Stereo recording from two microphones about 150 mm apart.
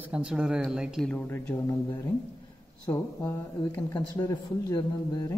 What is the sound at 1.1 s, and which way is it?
A man's voice, 15° left (ahead or behind).